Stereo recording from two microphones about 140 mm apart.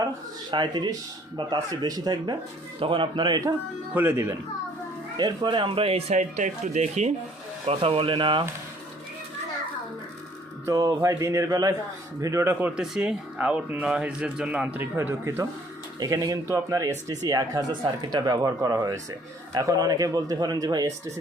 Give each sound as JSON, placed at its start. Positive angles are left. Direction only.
{"t": 0.5, "sound": "speech", "side_deg": -30}
{"t": 3.9, "sound": "speech", "side_deg": -15}
{"t": 5.1, "sound": "speech", "side_deg": -30}
{"t": 7.7, "sound": "speech", "side_deg": -45}
{"t": 10.7, "sound": "speech", "side_deg": -25}